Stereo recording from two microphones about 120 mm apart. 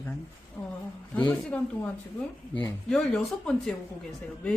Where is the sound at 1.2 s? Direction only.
10° left (ahead or behind).